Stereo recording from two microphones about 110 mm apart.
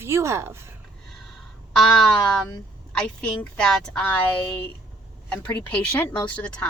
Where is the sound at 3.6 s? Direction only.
5° left (ahead or behind).